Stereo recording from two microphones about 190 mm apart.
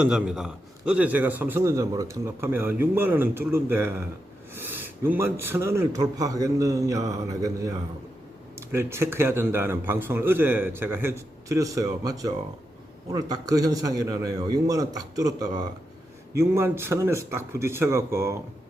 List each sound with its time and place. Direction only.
0.0 s a man's voice: 5° right (ahead or behind)